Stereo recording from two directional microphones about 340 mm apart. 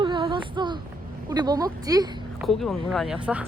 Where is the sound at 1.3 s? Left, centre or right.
Centre.